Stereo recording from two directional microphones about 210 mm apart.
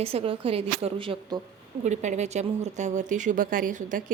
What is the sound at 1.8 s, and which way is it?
Speech, 35° right (ahead or behind).